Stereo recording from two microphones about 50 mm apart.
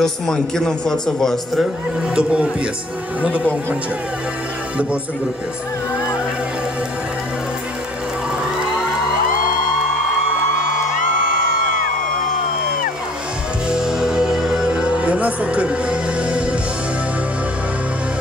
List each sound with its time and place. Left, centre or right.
0.0 s a man's voice: centre
2.1 s speech: right
13.7 s music: centre